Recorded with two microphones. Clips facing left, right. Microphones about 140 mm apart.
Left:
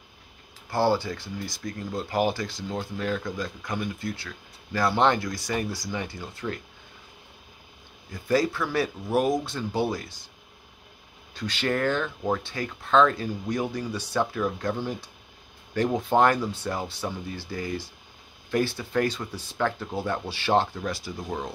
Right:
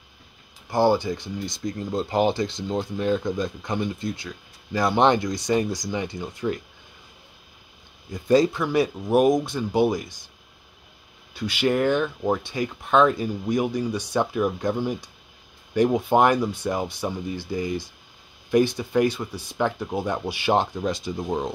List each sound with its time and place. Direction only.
0.7 s speech: 15° right (ahead or behind)
8.1 s speech: 20° right (ahead or behind)
11.3 s speech: 10° right (ahead or behind)